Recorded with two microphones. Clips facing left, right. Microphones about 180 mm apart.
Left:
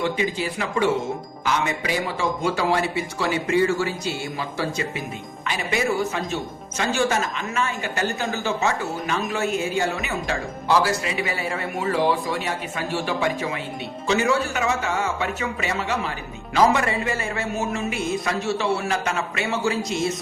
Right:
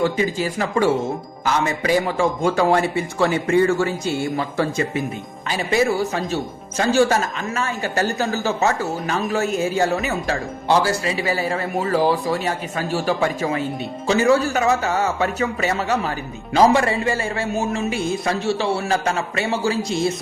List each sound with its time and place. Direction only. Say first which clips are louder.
0.0 s a man's voice: right 4 dB; 45° right (ahead or behind)
5.5 s speech: right 5 dB; 35° right (ahead or behind)